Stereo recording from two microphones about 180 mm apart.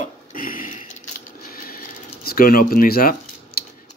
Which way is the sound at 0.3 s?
50° left (ahead or behind).